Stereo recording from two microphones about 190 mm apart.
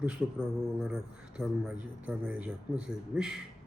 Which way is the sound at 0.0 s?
5° right (ahead or behind).